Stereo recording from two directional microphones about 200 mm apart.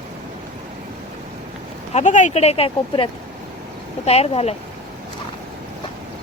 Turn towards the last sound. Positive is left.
turn(degrees=30)  # may be behind; listen again after turning